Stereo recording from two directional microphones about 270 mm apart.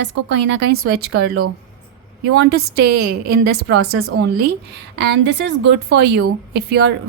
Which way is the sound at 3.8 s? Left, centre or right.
Right.